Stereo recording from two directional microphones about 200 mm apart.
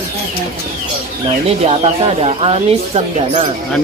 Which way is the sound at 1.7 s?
30° right (ahead or behind).